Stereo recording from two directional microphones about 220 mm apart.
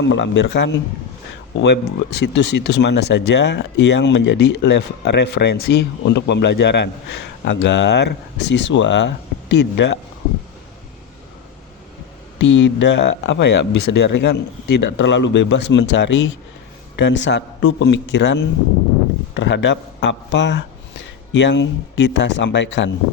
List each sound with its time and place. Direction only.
0.1 s speech: 55° left (ahead or behind)
12.4 s speech: 60° left (ahead or behind)